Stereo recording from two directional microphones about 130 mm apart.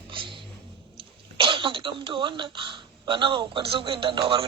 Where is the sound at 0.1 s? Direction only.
40° right (ahead or behind).